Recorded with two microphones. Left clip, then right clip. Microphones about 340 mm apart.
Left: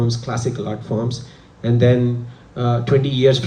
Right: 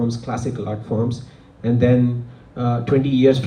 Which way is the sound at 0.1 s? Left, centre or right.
Left.